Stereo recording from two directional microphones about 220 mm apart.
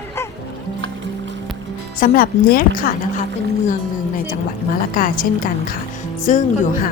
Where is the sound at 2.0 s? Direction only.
40° left (ahead or behind).